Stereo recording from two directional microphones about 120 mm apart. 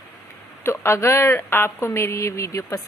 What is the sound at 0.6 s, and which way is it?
Speech, 20° left (ahead or behind).